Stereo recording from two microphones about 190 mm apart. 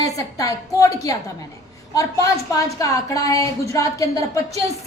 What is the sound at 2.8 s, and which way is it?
Speech, 15° left (ahead or behind).